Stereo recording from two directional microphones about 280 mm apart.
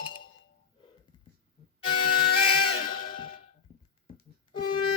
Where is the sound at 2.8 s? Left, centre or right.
Left.